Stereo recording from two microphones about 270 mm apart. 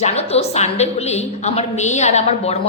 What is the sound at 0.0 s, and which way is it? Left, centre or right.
A woman's voice, left.